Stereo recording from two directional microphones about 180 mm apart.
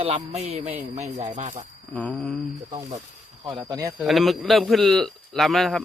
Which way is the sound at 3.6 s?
15° right (ahead or behind).